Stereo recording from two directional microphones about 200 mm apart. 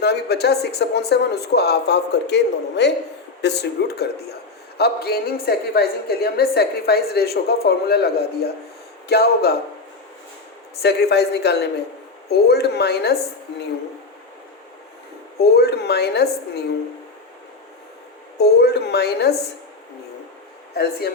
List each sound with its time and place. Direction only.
0.0 s a woman's voice: 55° left (ahead or behind)
10.8 s speech: 55° left (ahead or behind)
15.4 s a woman's voice: 55° left (ahead or behind)
18.3 s speech: 55° left (ahead or behind)